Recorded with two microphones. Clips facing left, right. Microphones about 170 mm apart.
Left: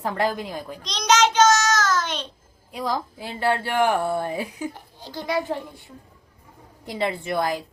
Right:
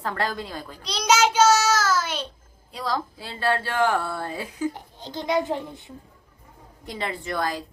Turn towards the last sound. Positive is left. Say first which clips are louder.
# left 3 dB
turn(degrees=20)  # may be behind; listen again after turning